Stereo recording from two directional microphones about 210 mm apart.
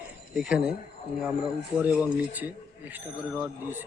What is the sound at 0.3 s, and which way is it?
Speech, 5° right (ahead or behind).